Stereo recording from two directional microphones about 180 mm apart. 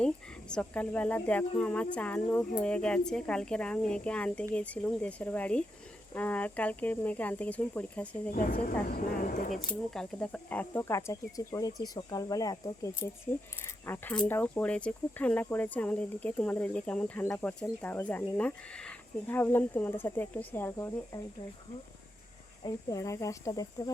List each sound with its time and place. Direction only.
0.0 s speech: 5° left (ahead or behind)
8.9 s speech: 50° left (ahead or behind)
9.9 s speech: 5° left (ahead or behind)
22.6 s speech: 20° left (ahead or behind)